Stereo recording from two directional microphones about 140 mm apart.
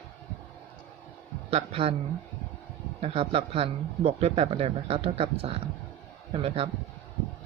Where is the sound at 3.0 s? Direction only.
45° right (ahead or behind).